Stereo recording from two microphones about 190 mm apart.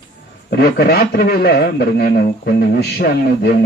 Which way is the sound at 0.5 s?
55° left (ahead or behind).